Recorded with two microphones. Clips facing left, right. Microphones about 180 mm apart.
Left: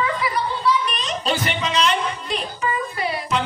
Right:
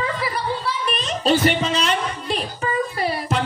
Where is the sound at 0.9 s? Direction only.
40° right (ahead or behind).